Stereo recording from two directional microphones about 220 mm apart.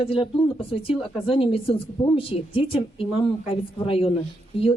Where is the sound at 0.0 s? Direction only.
25° left (ahead or behind).